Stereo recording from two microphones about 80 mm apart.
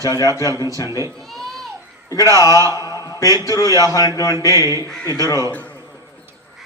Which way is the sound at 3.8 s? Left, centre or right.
Left.